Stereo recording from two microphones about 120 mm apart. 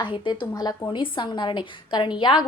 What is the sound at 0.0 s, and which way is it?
A woman's voice, 45° left (ahead or behind).